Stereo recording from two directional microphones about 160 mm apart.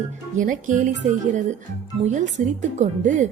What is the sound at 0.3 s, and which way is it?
Speech, 55° right (ahead or behind).